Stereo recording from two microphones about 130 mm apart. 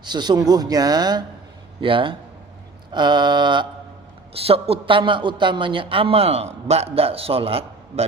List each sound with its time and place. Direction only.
0.0 s speech: 35° right (ahead or behind)
4.4 s a man's voice: 50° right (ahead or behind)